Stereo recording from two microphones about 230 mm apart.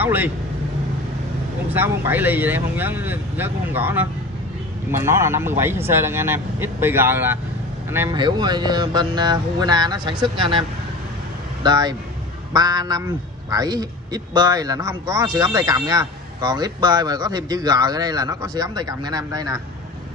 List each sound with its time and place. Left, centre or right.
0.0 s speech: centre
1.7 s speech: centre
11.6 s speech: centre